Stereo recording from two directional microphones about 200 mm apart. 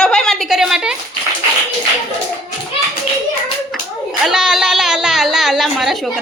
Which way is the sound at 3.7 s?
Centre (ahead or behind).